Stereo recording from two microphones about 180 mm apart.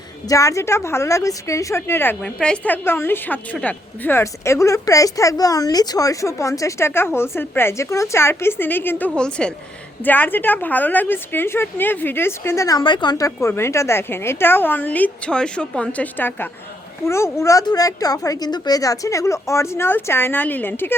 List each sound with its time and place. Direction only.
0.3 s a woman's voice: 15° left (ahead or behind)